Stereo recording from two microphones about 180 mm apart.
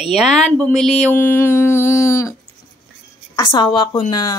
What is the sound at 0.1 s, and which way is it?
Speech, centre (ahead or behind).